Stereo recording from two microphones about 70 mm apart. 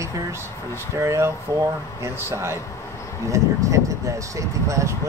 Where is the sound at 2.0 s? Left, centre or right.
Right.